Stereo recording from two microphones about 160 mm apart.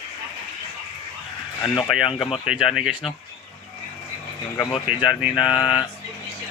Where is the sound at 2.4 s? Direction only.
5° right (ahead or behind).